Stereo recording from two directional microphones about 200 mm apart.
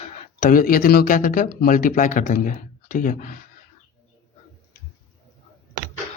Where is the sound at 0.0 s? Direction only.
40° left (ahead or behind).